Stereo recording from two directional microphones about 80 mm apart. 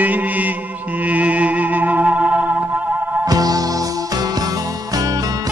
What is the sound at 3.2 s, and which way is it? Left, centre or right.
Music, right.